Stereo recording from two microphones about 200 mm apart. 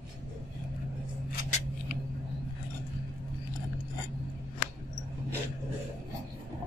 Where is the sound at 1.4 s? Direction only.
35° left (ahead or behind).